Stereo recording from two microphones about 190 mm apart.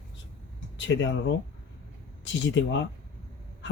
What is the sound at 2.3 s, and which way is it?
Speech, 70° left (ahead or behind).